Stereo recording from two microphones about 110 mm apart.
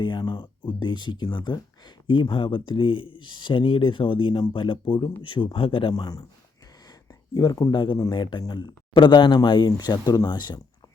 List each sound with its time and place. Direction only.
0.0 s a sound: 45° left (ahead or behind)
0.7 s speech: 45° left (ahead or behind)
5.9 s speech: 35° left (ahead or behind)
7.3 s speech: 35° left (ahead or behind)